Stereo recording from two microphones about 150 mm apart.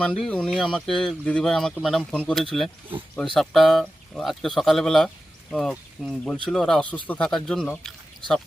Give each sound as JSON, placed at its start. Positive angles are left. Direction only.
{"t": 0.0, "sound": "speech", "side_deg": 5}